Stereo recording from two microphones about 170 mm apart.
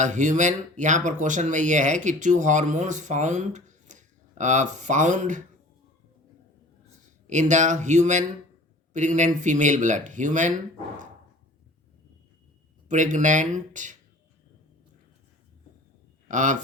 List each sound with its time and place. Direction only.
0.0 s speech: 45° right (ahead or behind)
7.3 s speech: 45° right (ahead or behind)
12.9 s speech: 45° right (ahead or behind)
16.3 s speech: 45° right (ahead or behind)